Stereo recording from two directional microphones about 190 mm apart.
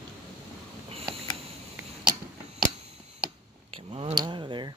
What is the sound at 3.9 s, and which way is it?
Tick, 30° right (ahead or behind).